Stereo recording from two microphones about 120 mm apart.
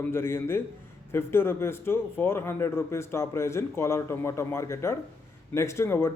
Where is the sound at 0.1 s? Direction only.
20° left (ahead or behind).